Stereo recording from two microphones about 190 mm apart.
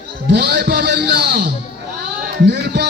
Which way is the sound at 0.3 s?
60° right (ahead or behind).